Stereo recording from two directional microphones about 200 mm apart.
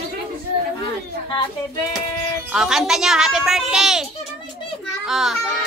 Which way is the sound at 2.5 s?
5° right (ahead or behind).